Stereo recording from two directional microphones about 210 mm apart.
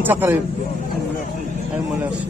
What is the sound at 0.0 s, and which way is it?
Speech, 10° right (ahead or behind).